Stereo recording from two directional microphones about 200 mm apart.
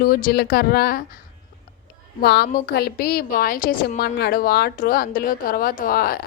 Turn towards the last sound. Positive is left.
turn(degrees=45)  # may be behind; listen again after turning